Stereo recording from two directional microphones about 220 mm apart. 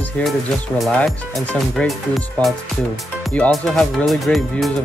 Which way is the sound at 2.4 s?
5° left (ahead or behind).